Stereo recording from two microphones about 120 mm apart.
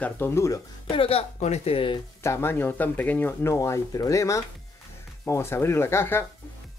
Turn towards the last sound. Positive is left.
turn(degrees=20)  # may be behind; listen again after turning